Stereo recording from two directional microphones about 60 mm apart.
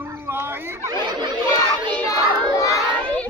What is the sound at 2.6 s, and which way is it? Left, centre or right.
Crowd, left.